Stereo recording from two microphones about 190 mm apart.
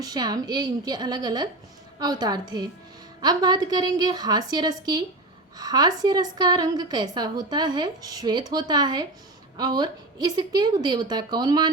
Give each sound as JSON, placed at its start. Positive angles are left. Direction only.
{"t": 0.0, "sound": "a woman's voice", "side_deg": -20}